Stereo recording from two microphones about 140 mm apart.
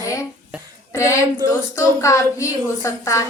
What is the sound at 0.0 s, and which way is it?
Cough, 25° left (ahead or behind).